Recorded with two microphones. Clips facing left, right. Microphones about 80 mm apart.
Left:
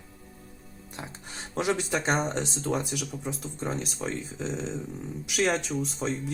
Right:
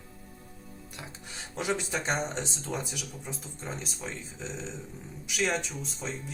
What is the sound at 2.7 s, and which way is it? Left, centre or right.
Speech, left.